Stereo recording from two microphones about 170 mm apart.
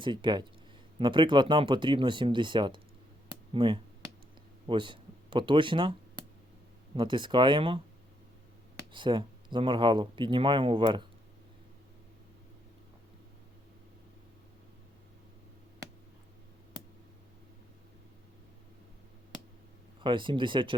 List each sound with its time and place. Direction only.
0.0 s speech: 30° right (ahead or behind)
8.9 s speech: 30° right (ahead or behind)
20.0 s speech: 30° right (ahead or behind)